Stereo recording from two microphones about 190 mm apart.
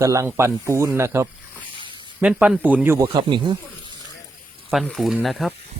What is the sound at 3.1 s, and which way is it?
Speech, 25° right (ahead or behind).